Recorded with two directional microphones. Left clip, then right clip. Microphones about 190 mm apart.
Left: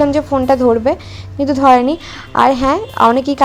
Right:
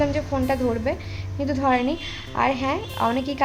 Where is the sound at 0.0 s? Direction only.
35° left (ahead or behind).